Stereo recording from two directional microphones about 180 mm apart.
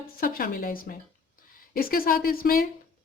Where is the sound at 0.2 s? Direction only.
50° left (ahead or behind).